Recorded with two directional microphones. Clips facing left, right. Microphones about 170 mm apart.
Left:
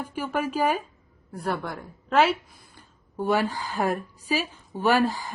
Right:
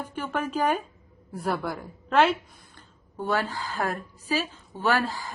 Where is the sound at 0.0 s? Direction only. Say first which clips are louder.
Left 2 dB; 10° left (ahead or behind).